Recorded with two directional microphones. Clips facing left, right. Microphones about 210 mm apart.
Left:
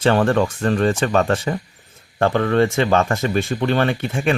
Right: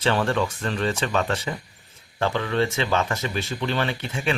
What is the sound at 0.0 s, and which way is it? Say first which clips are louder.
Speech: left 6 dB; 50° left (ahead or behind).